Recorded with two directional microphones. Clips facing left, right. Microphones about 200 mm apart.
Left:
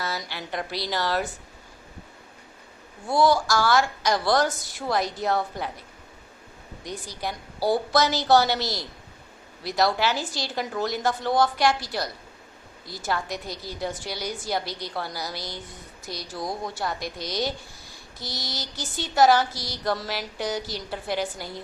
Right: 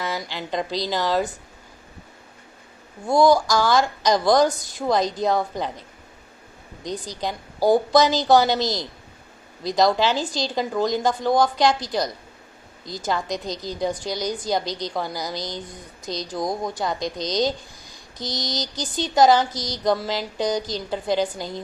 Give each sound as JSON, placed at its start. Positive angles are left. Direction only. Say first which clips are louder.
{"t": 0.0, "sound": "speech", "louder": "right 4 dB", "side_deg": -15}
{"t": 3.1, "sound": "speech", "louder": "right 4 dB", "side_deg": -15}
{"t": 6.8, "sound": "speech", "louder": "right 4 dB", "side_deg": -15}